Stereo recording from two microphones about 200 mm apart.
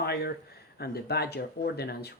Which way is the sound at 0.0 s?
55° left (ahead or behind).